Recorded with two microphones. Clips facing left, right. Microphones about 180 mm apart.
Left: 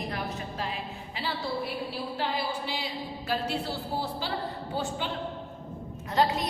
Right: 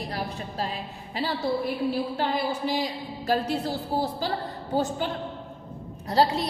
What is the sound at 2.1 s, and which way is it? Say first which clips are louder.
A woman's voice: right 4 dB; 45° right (ahead or behind).